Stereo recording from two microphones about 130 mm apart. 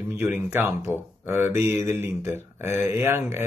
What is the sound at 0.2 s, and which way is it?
Speech, 15° right (ahead or behind).